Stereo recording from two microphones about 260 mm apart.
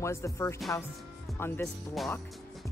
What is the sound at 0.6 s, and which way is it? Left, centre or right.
Speech, centre.